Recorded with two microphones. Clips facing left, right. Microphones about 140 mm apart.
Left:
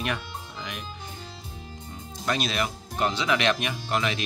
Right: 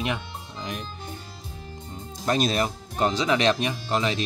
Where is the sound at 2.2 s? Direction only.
40° right (ahead or behind).